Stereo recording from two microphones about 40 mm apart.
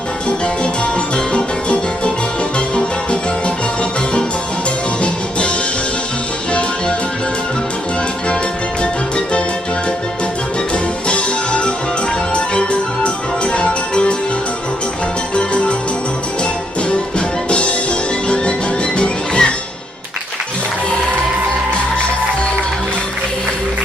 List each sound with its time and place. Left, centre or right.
0.3 s music: left
6.5 s music: left
8.8 s music: left
11.1 s music: left
15.4 s music: left
17.2 s music: left
18.9 s music: left